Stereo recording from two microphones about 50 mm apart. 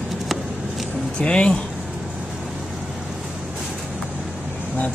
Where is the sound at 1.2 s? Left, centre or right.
Left.